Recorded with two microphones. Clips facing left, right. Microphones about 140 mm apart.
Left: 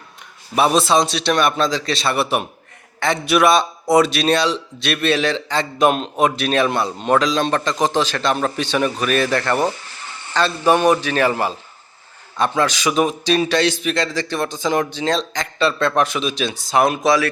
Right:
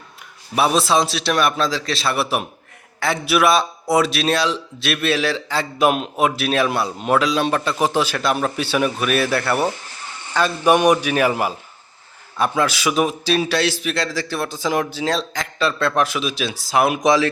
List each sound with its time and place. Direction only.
0.5 s a man's voice: centre (ahead or behind)
17.0 s speech: 20° right (ahead or behind)